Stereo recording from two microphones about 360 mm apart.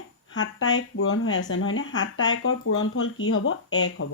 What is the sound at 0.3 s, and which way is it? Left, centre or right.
Speech, left.